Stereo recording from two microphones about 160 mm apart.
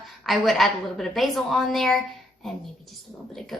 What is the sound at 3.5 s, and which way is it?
Speech, centre (ahead or behind).